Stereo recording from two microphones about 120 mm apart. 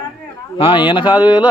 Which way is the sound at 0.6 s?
45° left (ahead or behind).